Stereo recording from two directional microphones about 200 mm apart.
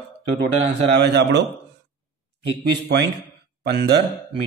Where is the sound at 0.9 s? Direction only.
60° right (ahead or behind).